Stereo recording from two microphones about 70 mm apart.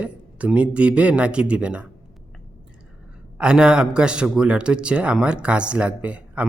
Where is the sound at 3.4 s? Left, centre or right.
Centre.